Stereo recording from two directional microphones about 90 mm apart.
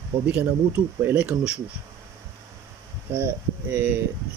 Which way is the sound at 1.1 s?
15° right (ahead or behind).